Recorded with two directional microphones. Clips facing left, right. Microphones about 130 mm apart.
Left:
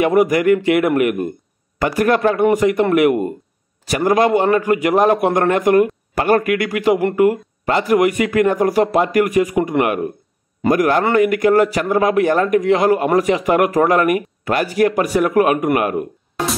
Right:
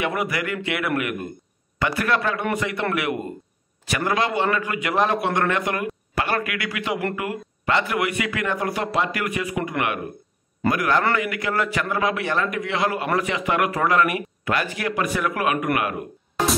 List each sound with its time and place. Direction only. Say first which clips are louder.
0.0 s a man's voice: left 11 dB; 45° left (ahead or behind)